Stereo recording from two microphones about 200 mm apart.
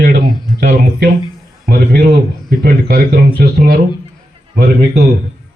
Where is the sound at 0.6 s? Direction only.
55° right (ahead or behind).